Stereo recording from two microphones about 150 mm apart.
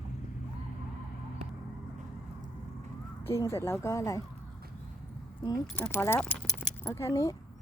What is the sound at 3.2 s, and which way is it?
Speech, 20° left (ahead or behind).